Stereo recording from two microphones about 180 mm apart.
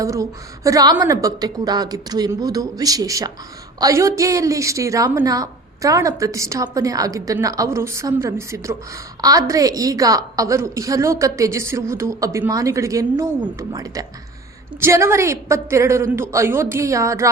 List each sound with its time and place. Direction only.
0.0 s a woman's voice: 20° right (ahead or behind)